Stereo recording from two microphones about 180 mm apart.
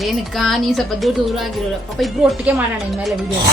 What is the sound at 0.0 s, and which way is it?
Speech, centre (ahead or behind).